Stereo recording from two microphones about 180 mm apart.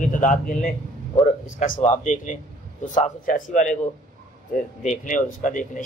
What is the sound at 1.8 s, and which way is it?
Speech, 45° left (ahead or behind).